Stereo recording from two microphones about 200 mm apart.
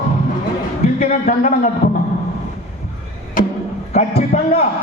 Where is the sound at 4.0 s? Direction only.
30° left (ahead or behind).